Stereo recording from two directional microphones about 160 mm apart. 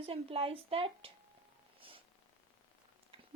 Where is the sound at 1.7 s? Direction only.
35° right (ahead or behind).